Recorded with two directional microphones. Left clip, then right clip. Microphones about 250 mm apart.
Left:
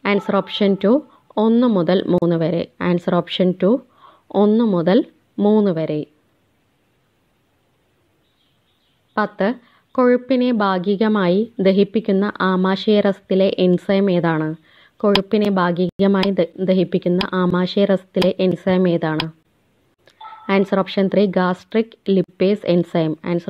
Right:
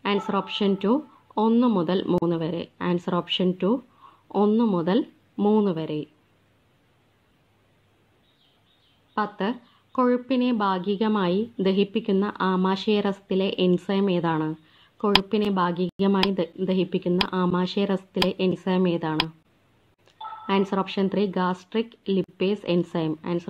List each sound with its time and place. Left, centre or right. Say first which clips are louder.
0.0 s a woman's voice: left 7 dB; left
9.1 s a woman's voice: left 7 dB; left
20.2 s a sound: even; centre
20.4 s a woman's voice: left 7 dB; left